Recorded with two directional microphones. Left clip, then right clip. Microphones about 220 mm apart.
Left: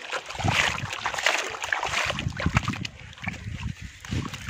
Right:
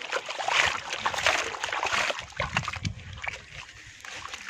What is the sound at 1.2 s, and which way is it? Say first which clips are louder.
Boat: left 2 dB; 5° left (ahead or behind).